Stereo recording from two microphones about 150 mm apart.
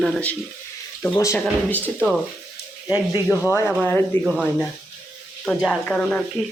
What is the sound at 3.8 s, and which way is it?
Speech, 10° left (ahead or behind).